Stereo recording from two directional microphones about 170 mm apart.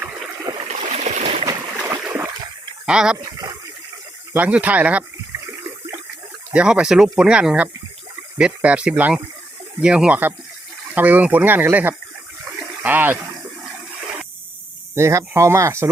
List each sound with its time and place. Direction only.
0.8 s stream: 45° right (ahead or behind)
1.9 s stream: 15° right (ahead or behind)
2.8 s speech: 5° right (ahead or behind)
3.2 s a sound: 20° right (ahead or behind)
4.3 s speech: 10° right (ahead or behind)
6.5 s speech: 5° right (ahead or behind)
14.9 s speech: 15° right (ahead or behind)